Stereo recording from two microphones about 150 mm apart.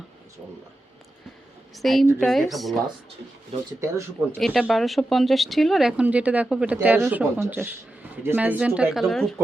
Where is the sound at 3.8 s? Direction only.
20° right (ahead or behind).